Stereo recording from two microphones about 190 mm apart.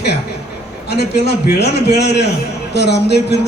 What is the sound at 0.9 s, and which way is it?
A man's voice, 60° left (ahead or behind).